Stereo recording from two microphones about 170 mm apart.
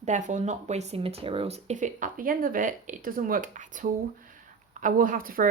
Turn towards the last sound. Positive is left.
turn(degrees=-55)  # may be behind; listen again after turning